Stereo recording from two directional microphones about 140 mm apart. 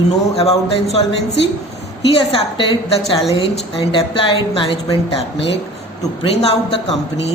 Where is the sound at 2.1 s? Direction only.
40° left (ahead or behind).